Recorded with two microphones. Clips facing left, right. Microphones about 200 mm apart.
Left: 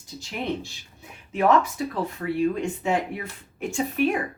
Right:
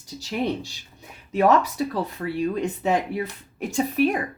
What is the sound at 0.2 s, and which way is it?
Speech, 35° right (ahead or behind).